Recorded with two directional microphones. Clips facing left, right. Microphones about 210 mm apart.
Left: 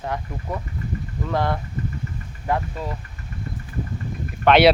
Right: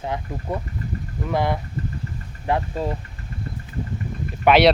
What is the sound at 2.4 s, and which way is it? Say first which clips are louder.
Speech: right 2 dB; 30° right (ahead or behind).